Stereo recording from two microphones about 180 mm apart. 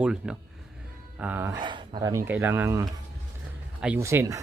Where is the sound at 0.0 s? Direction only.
5° right (ahead or behind).